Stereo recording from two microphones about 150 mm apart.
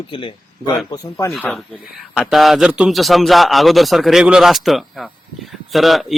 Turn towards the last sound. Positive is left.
turn(degrees=0)  # may be behind; listen again after turning